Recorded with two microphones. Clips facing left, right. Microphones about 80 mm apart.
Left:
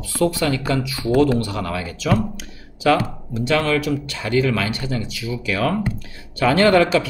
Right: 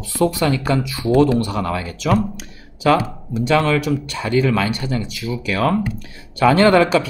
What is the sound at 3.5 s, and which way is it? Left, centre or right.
Speech, right.